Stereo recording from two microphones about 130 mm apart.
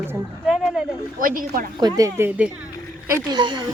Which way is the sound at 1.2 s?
90° right.